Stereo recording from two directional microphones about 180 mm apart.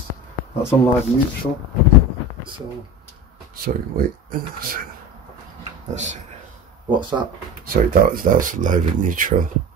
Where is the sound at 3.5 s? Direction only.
55° right (ahead or behind).